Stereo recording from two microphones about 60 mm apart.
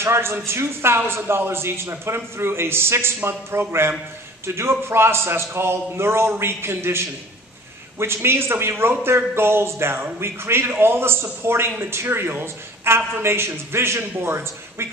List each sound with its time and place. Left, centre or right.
0.0 s a man's voice: right